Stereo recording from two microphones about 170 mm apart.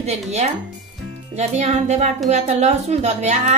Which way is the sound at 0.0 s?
40° right (ahead or behind).